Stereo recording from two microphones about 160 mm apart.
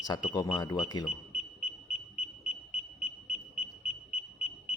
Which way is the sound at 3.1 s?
40° left (ahead or behind).